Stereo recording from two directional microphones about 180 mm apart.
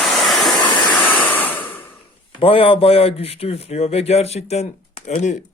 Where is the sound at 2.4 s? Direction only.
30° left (ahead or behind).